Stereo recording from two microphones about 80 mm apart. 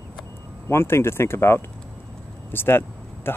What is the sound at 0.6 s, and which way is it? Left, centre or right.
Speech, left.